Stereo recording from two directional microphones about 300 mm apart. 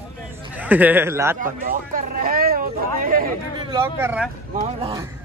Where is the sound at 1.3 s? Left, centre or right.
Right.